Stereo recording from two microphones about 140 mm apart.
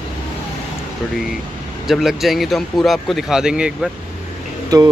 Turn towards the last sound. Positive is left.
turn(degrees=-30)  # may be behind; listen again after turning